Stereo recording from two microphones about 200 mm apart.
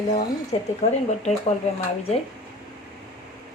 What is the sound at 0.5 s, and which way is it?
Speech, 25° left (ahead or behind).